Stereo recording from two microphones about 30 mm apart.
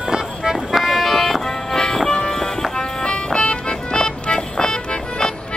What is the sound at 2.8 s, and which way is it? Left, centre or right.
Music, left.